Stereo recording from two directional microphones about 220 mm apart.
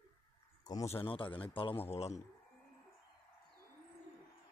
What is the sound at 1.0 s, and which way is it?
Speech, 25° left (ahead or behind).